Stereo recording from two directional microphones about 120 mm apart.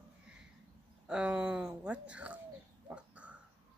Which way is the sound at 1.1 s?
10° right (ahead or behind).